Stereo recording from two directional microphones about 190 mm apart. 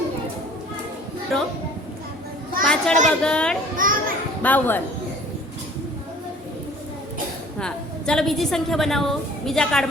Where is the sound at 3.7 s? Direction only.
45° right (ahead or behind).